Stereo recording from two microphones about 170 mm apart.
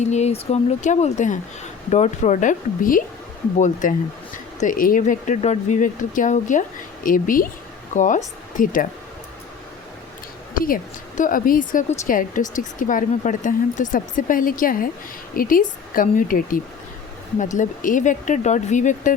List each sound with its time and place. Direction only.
0.0 s speech: 40° left (ahead or behind)
10.5 s a woman's voice: 55° left (ahead or behind)